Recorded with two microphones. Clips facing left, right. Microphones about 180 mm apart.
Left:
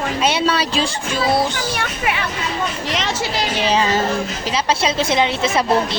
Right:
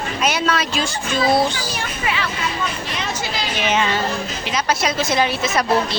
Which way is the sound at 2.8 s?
90° left.